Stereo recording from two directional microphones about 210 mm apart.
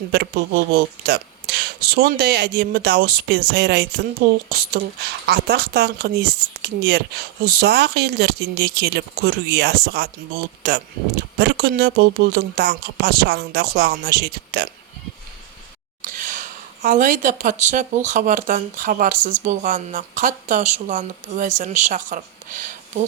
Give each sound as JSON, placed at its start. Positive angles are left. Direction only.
{"t": 0.1, "sound": "speech", "side_deg": -50}
{"t": 16.0, "sound": "speech", "side_deg": -40}